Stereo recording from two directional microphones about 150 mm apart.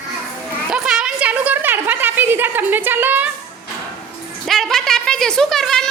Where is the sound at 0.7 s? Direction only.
5° right (ahead or behind).